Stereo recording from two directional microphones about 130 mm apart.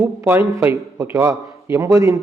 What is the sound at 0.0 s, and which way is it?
A man's voice, 20° right (ahead or behind).